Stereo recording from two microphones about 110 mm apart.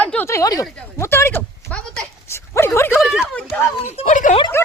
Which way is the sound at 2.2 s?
25° left (ahead or behind).